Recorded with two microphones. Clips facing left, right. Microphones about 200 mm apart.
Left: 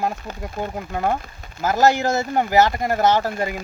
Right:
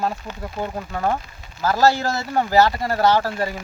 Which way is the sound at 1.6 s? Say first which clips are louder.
Left 1 dB; 20° left (ahead or behind).